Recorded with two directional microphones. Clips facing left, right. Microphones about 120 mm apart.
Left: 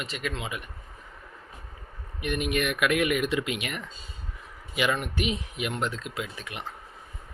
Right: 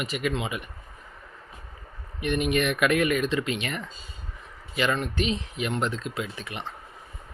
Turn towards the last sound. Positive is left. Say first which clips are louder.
# right 2 dB
turn(degrees=5)  # may be behind; listen again after turning